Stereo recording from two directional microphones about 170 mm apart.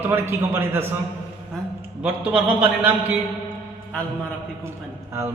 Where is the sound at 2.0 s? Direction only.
10° right (ahead or behind).